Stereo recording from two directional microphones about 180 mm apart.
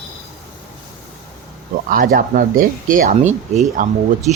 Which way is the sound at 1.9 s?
55° right (ahead or behind).